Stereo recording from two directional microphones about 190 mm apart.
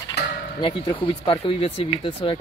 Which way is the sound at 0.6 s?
30° left (ahead or behind).